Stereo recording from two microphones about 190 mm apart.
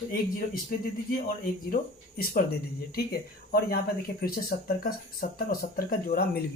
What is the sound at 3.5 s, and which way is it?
Speech, 55° left (ahead or behind).